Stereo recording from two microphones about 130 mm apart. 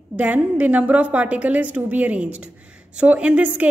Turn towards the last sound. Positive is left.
turn(degrees=-10)  # may be behind; listen again after turning